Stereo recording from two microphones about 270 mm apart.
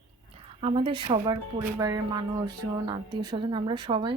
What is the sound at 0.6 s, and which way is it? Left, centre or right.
Speech, centre.